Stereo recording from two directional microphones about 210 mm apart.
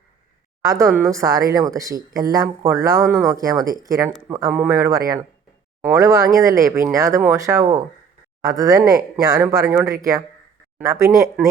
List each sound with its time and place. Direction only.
0.6 s a woman's voice: 15° right (ahead or behind)
0.9 s a woman's voice: centre (ahead or behind)
1.1 s speech: 15° right (ahead or behind)